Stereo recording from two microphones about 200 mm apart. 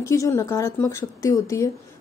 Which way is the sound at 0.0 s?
15° left (ahead or behind).